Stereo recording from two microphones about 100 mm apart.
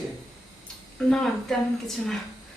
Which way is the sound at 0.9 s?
5° left (ahead or behind).